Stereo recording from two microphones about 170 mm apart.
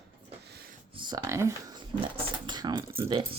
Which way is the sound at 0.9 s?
25° right (ahead or behind).